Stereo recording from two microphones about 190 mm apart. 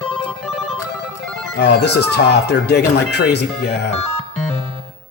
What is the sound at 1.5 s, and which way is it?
Speech, 60° left (ahead or behind).